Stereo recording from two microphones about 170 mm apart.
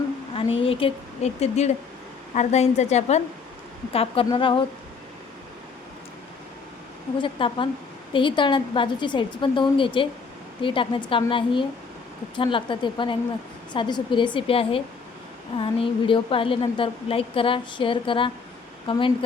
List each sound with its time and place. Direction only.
0.3 s a woman's voice: 35° left (ahead or behind)
7.2 s a woman's voice: 30° left (ahead or behind)